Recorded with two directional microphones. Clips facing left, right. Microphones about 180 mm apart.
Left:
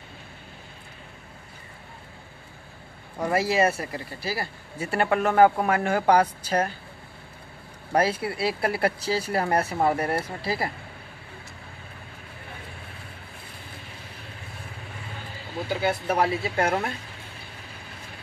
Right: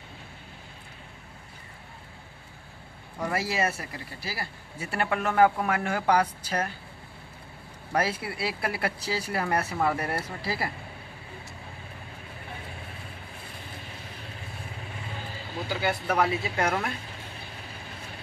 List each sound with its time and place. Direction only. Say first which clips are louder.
3.2 s a woman's voice: left 6 dB; 25° left (ahead or behind)
7.9 s speech: left 5 dB; 30° left (ahead or behind)
15.7 s speech: left 3 dB; 25° left (ahead or behind)